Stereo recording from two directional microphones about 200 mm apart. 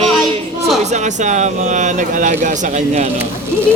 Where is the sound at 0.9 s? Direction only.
35° right (ahead or behind).